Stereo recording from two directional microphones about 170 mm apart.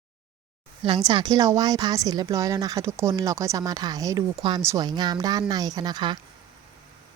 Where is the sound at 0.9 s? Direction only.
25° right (ahead or behind).